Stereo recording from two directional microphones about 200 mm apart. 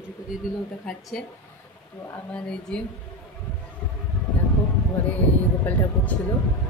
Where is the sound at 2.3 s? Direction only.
5° left (ahead or behind).